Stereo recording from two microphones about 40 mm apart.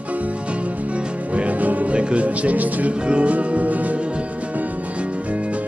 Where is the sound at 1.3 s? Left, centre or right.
Right.